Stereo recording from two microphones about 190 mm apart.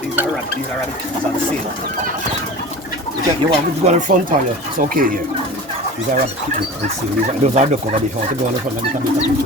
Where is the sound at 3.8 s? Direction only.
40° right (ahead or behind).